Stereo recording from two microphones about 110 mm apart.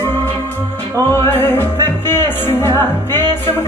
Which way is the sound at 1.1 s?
20° left (ahead or behind).